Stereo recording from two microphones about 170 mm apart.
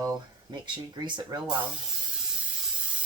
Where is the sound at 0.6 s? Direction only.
25° right (ahead or behind).